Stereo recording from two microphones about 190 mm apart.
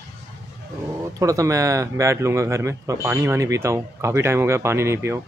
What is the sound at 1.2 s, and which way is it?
Speech, 15° right (ahead or behind).